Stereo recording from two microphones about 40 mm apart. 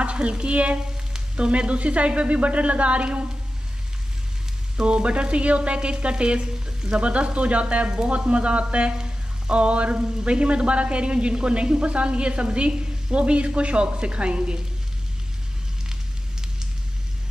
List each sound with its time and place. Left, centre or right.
0.0 s speech: right
4.7 s a sound: right
15.9 s fire: centre